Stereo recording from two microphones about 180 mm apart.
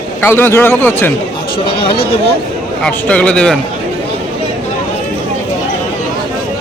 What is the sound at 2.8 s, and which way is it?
Speech, 5° left (ahead or behind).